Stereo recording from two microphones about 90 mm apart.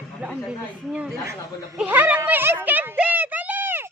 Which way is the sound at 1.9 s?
20° right (ahead or behind).